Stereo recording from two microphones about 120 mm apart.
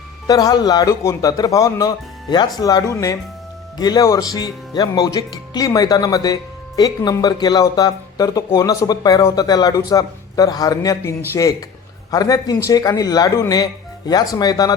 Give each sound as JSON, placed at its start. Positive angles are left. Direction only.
{"t": 0.3, "sound": "speech", "side_deg": 30}
{"t": 12.1, "sound": "speech", "side_deg": 30}